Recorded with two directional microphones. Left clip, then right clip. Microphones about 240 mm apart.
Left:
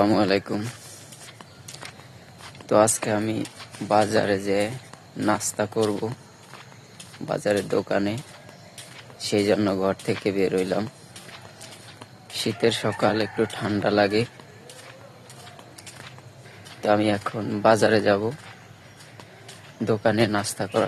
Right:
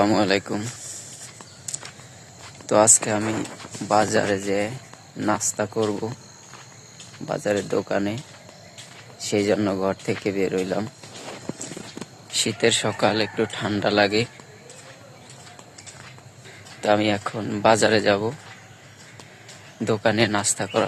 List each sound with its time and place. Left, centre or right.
0.0 s speech: centre
1.6 s a sound: centre
2.6 s speech: centre
7.3 s speech: centre
12.3 s speech: centre
16.8 s speech: centre
19.8 s speech: centre